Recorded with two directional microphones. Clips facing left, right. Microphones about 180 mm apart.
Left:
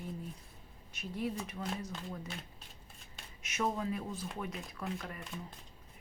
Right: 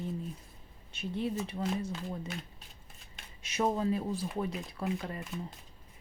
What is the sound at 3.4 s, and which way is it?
Speech, 30° right (ahead or behind).